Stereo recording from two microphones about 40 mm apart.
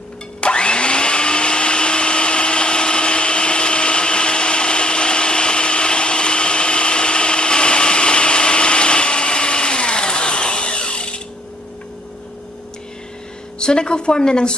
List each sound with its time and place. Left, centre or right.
0.4 s blender: left
13.6 s a woman's voice: left